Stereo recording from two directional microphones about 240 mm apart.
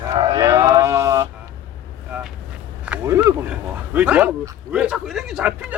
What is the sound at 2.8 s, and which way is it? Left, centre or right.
Speech, centre.